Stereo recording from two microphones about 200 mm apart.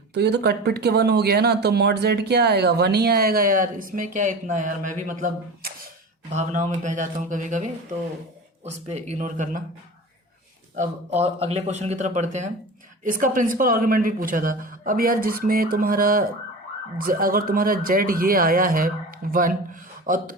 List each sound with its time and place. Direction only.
0.1 s a man's voice: 55° right (ahead or behind); by 9.6 s 40° right (ahead or behind)
10.8 s a man's voice: 35° right (ahead or behind)